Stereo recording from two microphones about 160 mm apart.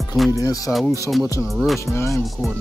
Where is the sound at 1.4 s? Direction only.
Centre (ahead or behind).